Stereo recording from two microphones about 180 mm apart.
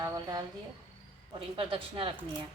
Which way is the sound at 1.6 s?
30° right (ahead or behind).